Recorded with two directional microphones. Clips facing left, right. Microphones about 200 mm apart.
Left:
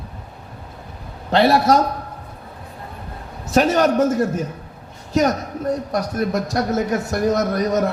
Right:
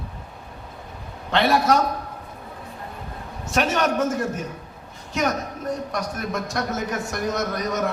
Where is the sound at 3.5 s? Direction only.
35° left (ahead or behind).